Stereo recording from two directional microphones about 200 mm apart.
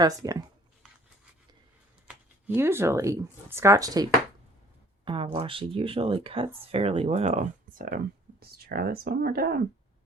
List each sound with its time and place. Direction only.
0.0 s speech: 15° right (ahead or behind)
2.0 s speech: 10° right (ahead or behind); by 9.6 s 50° right (ahead or behind)